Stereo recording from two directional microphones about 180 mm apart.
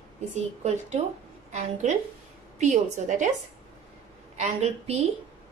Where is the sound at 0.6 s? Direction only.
40° right (ahead or behind).